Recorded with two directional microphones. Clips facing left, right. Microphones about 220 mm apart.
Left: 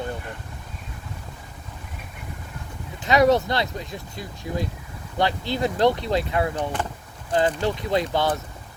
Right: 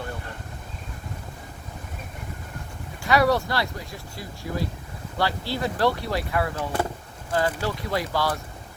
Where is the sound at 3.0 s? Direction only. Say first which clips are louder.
Left 3 dB; 20° left (ahead or behind).